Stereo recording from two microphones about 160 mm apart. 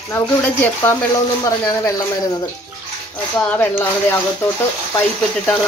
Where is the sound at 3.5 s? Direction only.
10° left (ahead or behind).